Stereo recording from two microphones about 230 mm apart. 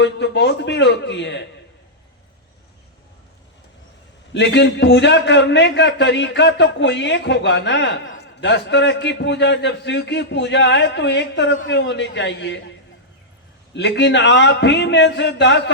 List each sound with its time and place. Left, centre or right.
0.0 s a man's voice: left
4.4 s a man's voice: left
13.7 s a man's voice: left